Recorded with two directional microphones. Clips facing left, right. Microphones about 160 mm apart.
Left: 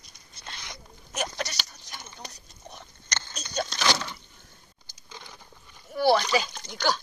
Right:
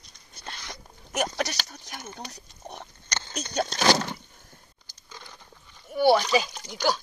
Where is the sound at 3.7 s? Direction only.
40° right (ahead or behind).